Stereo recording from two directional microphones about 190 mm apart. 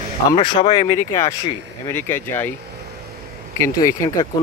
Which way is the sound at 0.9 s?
15° left (ahead or behind).